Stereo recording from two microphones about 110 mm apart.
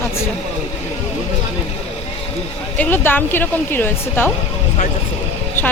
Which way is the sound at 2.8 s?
15° left (ahead or behind).